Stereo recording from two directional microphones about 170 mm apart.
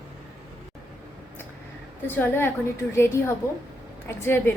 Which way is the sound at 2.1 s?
15° left (ahead or behind).